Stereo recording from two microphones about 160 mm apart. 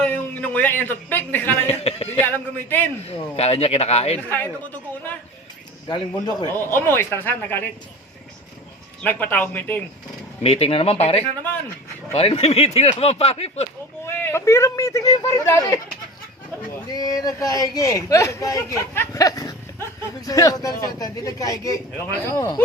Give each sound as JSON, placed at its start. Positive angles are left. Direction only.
{"t": 0.0, "sound": "a sound", "side_deg": 10}
{"t": 1.6, "sound": "a sound", "side_deg": 40}
{"t": 2.2, "sound": "speech", "side_deg": 10}
{"t": 3.1, "sound": "speech", "side_deg": 40}
{"t": 4.3, "sound": "speech", "side_deg": 10}
{"t": 5.9, "sound": "a man's voice", "side_deg": 25}
{"t": 6.5, "sound": "speech", "side_deg": 15}
{"t": 9.0, "sound": "speech", "side_deg": 10}
{"t": 10.4, "sound": "speech", "side_deg": 40}
{"t": 14.2, "sound": "a man's voice", "side_deg": 15}
{"t": 16.9, "sound": "a man's voice", "side_deg": 25}